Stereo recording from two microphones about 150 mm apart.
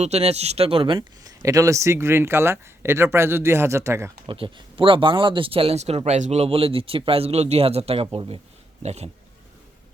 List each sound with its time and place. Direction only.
0.0 s speech: 45° right (ahead or behind); by 4.1 s 20° right (ahead or behind)
4.3 s speech: 35° right (ahead or behind)